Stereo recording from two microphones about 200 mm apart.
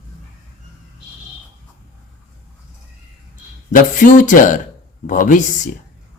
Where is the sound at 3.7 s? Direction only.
40° left (ahead or behind).